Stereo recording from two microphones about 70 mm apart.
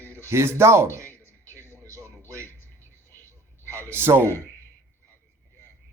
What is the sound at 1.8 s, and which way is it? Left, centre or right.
Television, right.